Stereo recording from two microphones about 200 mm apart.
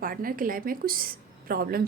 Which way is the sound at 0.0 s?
45° right (ahead or behind).